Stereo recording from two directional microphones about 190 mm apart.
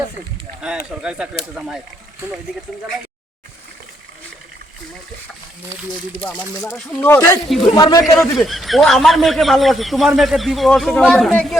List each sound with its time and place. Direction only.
0.6 s speech: 5° right (ahead or behind)
6.2 s speech: 10° left (ahead or behind)
7.4 s speech: centre (ahead or behind)
7.8 s a man's voice: 20° left (ahead or behind)
8.2 s speech: centre (ahead or behind)